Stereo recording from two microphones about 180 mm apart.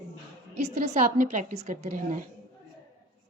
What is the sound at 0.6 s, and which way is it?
A woman's voice, 40° right (ahead or behind).